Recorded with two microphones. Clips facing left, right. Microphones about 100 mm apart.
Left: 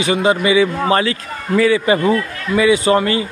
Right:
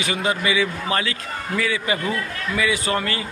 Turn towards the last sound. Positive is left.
turn(degrees=20)  # may be behind; listen again after turning